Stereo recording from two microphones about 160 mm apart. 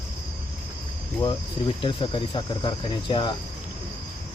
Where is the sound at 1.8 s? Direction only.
30° left (ahead or behind).